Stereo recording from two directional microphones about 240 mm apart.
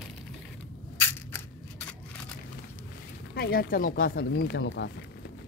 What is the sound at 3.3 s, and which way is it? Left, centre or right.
Speech, left.